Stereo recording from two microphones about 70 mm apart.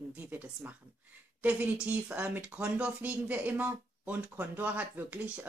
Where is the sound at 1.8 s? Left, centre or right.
Centre.